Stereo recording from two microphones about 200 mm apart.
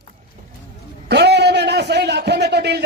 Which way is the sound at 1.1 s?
55° right (ahead or behind).